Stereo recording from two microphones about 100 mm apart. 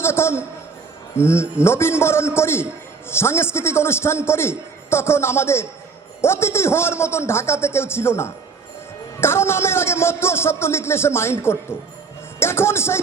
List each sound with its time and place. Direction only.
0.0 s a man's voice: 25° left (ahead or behind)